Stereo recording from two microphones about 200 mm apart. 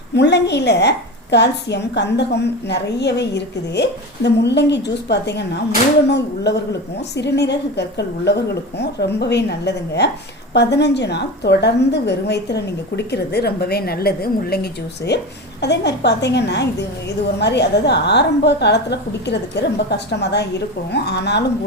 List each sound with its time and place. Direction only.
0.1 s a woman's voice: 60° left (ahead or behind)